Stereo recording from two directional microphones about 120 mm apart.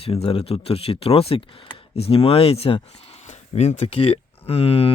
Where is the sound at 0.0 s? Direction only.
55° left (ahead or behind).